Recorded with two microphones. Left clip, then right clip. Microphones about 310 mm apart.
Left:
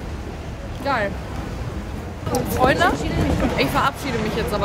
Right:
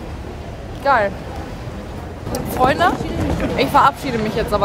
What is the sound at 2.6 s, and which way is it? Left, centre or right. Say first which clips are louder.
Speech: right 3 dB; centre.